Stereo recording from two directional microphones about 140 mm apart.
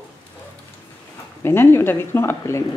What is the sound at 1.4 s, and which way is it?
Speech, 15° left (ahead or behind).